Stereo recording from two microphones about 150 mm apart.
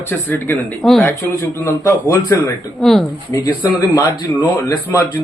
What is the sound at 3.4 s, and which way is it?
Speech, 20° left (ahead or behind).